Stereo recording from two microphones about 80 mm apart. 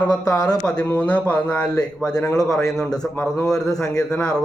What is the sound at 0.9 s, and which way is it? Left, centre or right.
Speech, centre.